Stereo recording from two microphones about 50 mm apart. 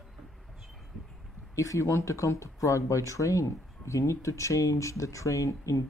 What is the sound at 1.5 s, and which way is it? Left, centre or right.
Speech, left.